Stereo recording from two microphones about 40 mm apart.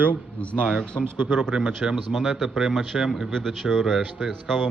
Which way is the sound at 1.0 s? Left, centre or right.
Right.